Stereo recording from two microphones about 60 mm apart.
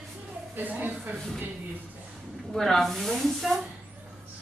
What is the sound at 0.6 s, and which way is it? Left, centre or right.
Speech, right.